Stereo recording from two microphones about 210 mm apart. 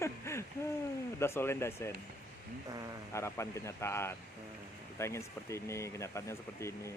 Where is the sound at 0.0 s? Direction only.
15° left (ahead or behind).